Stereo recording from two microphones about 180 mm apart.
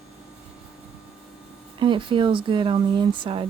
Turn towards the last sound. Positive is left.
turn(degrees=-30)  # may be behind; listen again after turning